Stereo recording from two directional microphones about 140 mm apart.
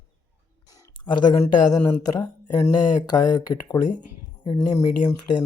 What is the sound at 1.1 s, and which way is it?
Speech, 30° left (ahead or behind).